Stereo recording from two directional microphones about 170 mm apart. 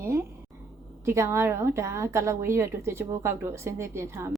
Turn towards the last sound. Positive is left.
turn(degrees=-15)  # may be behind; listen again after turning